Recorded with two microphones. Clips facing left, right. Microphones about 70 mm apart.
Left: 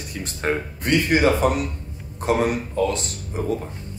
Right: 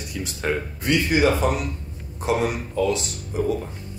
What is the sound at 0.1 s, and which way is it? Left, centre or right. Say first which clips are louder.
Speech: left 1 dB; left.